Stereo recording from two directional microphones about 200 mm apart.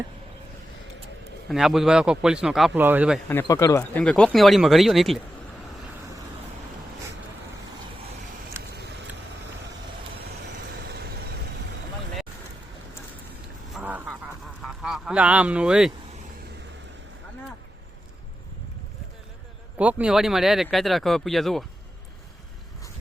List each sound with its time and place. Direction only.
1.5 s speech: centre (ahead or behind)
3.4 s speech: 15° left (ahead or behind); by 5.2 s centre (ahead or behind)
10.8 s vehicle: 55° right (ahead or behind)
13.7 s a sound: 10° right (ahead or behind)
14.6 s honk: centre (ahead or behind)
19.8 s speech: 5° right (ahead or behind)